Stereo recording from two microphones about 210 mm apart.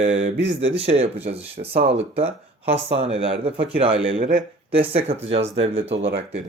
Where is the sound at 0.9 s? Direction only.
30° right (ahead or behind).